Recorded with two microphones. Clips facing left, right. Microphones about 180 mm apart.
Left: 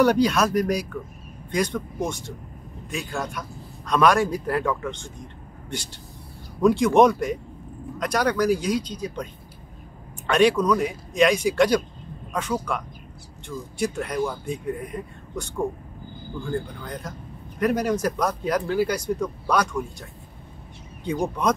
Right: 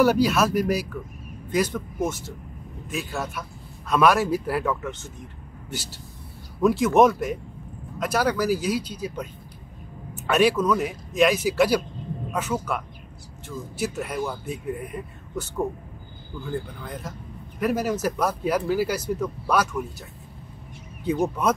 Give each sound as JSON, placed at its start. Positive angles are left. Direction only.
{"t": 0.0, "sound": "speech", "side_deg": -5}
{"t": 21.0, "sound": "speech", "side_deg": -5}